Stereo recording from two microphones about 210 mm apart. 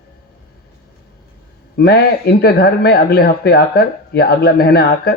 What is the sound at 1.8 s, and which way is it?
Speech, 50° left (ahead or behind).